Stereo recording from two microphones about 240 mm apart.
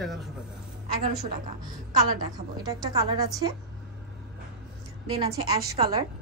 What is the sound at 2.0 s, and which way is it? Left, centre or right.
A woman's voice, centre.